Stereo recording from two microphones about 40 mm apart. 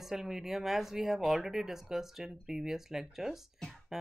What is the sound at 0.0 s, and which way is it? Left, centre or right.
Speech, centre.